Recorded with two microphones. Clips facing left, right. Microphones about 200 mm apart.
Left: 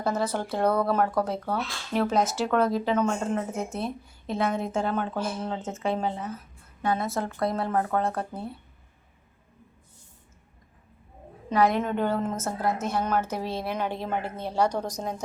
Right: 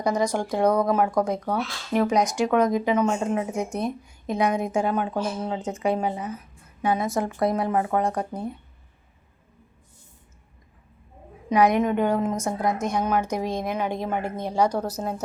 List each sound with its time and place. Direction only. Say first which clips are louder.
0.0 s a woman's voice: right 4 dB; 15° right (ahead or behind)
11.4 s a woman's voice: right 4 dB; 15° right (ahead or behind)